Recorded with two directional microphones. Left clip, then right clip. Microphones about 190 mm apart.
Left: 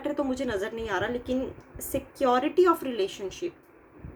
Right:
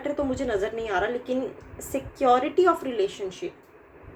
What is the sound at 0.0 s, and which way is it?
A woman's voice, 55° left (ahead or behind).